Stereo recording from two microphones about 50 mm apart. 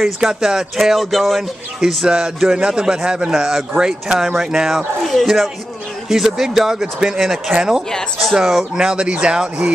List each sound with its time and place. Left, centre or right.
0.2 s speech: centre
2.0 s speech: centre
8.8 s speech: centre